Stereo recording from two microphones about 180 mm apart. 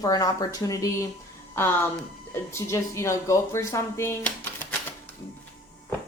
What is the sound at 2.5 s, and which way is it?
Speech, 15° left (ahead or behind).